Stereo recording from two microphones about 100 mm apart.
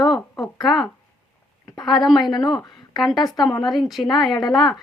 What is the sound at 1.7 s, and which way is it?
A woman's voice, 45° left (ahead or behind).